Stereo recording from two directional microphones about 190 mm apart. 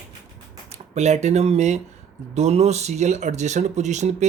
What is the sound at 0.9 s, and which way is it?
Speech, 35° right (ahead or behind).